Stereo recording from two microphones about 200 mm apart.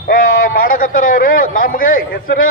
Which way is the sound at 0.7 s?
45° left (ahead or behind).